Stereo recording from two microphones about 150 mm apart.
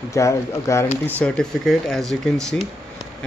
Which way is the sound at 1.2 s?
Centre (ahead or behind).